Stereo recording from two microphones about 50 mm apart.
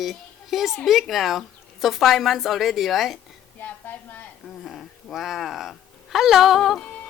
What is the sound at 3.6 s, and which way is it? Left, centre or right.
Speech, left.